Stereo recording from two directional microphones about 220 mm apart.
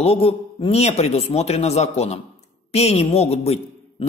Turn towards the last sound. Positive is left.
turn(degrees=30)  # may be behind; listen again after turning